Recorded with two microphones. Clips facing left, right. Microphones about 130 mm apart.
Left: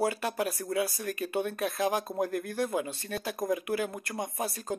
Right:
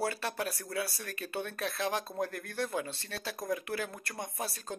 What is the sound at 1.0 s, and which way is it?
Speech, 10° left (ahead or behind).